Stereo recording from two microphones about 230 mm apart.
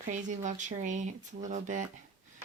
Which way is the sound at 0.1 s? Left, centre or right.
Right.